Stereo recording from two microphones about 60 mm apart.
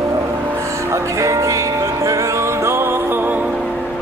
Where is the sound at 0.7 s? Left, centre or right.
Right.